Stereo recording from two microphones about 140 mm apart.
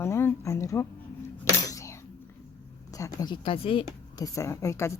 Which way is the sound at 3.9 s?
25° left (ahead or behind).